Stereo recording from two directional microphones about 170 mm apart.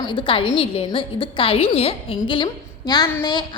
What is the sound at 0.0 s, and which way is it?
A woman's voice, 30° left (ahead or behind).